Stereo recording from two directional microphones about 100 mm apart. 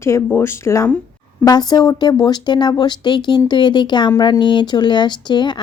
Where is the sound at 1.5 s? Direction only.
40° left (ahead or behind).